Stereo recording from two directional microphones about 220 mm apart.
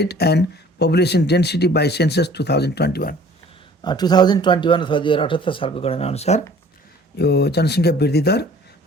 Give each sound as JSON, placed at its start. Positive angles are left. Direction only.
{"t": 0.0, "sound": "speech", "side_deg": 45}
{"t": 3.8, "sound": "speech", "side_deg": 20}
{"t": 7.2, "sound": "speech", "side_deg": 50}